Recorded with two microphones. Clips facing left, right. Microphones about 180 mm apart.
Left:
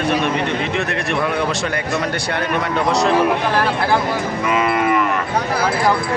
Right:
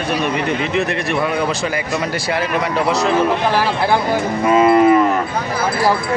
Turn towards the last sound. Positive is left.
turn(degrees=-35)  # may be behind; listen again after turning